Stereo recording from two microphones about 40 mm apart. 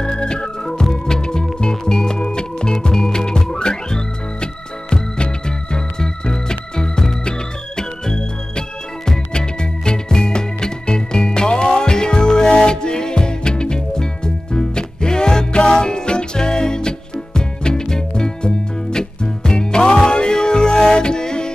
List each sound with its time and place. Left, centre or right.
0.0 s organ: centre
0.8 s music: centre